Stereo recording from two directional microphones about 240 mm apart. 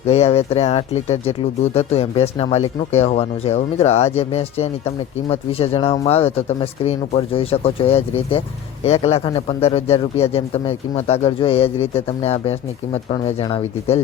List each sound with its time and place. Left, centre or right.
0.1 s a man's voice: left